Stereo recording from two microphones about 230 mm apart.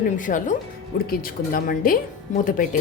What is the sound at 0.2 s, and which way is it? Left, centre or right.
A woman's voice, left.